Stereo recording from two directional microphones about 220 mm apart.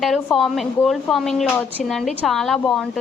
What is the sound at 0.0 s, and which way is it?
A woman's voice, centre (ahead or behind).